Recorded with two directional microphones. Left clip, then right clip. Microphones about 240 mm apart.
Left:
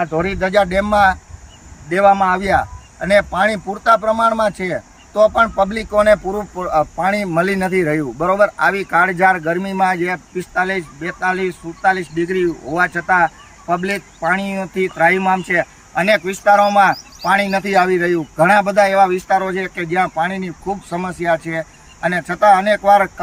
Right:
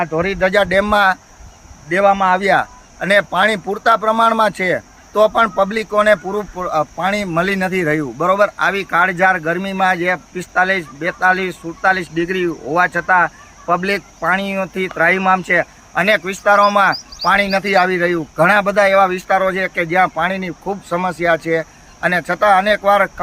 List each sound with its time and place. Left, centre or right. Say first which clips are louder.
0.0 s speech: right 2 dB; centre